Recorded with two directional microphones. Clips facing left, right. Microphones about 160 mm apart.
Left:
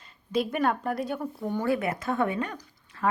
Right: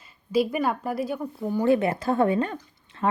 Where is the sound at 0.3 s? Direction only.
5° right (ahead or behind).